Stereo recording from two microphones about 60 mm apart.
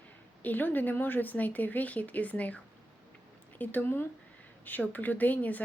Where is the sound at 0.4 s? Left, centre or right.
Left.